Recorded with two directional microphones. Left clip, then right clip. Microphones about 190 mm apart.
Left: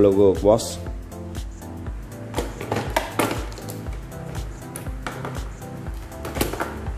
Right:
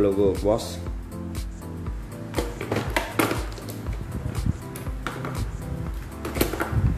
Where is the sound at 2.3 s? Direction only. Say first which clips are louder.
Left 1 dB; centre (ahead or behind).